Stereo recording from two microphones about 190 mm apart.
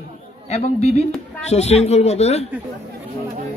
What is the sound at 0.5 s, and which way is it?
Speech, 35° left (ahead or behind).